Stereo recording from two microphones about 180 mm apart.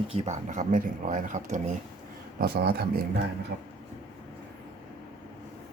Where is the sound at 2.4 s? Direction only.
60° right (ahead or behind).